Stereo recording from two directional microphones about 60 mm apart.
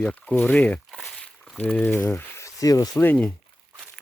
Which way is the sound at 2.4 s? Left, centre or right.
Left.